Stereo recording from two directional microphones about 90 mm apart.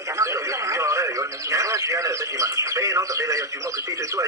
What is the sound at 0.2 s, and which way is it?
Radio, 35° right (ahead or behind).